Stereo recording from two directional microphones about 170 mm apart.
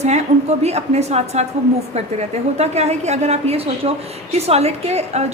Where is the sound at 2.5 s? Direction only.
40° right (ahead or behind).